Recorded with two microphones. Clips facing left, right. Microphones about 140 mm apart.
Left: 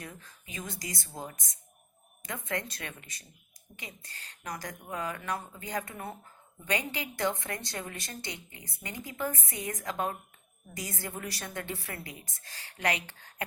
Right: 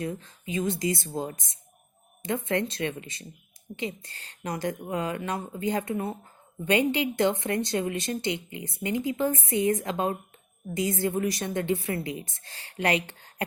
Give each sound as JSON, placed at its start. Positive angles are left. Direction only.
{"t": 0.0, "sound": "a woman's voice", "side_deg": -25}